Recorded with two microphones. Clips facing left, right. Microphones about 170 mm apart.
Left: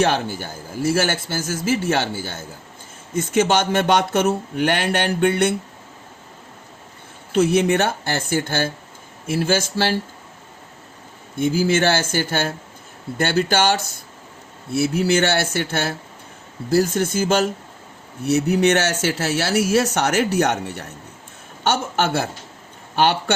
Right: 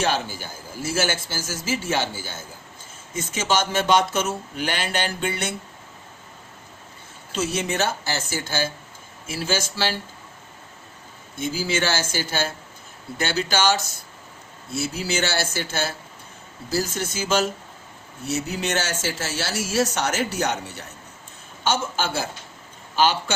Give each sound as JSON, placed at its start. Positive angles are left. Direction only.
{"t": 0.0, "sound": "speech", "side_deg": 55}
{"t": 7.3, "sound": "speech", "side_deg": 60}
{"t": 11.3, "sound": "a man's voice", "side_deg": 55}